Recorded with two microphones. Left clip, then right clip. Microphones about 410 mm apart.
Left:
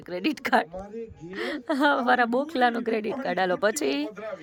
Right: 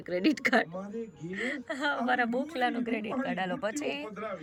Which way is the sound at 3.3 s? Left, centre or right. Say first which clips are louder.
Left 9 dB; left.